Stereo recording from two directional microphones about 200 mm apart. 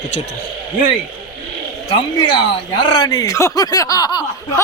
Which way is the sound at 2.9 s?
15° left (ahead or behind).